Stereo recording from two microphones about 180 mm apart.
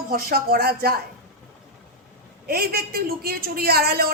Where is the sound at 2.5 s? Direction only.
60° right (ahead or behind).